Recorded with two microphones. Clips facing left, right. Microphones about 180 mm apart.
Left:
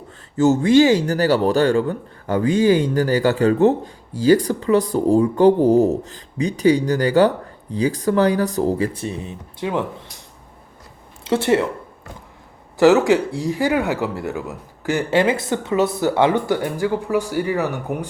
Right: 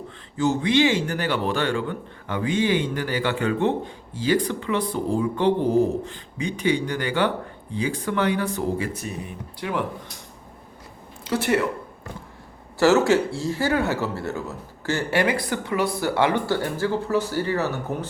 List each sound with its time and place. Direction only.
0.3 s a man's voice: 45° left (ahead or behind); by 9.8 s 20° left (ahead or behind)
11.2 s a woman's voice: 25° left (ahead or behind)
12.8 s speech: 15° left (ahead or behind)